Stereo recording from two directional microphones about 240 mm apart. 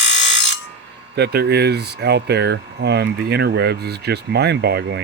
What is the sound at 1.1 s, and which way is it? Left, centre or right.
Speech, right.